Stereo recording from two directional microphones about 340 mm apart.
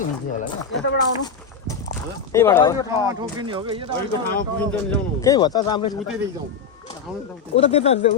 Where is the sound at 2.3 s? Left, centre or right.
Centre.